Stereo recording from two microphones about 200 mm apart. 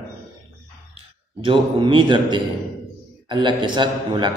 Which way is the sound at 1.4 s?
25° right (ahead or behind).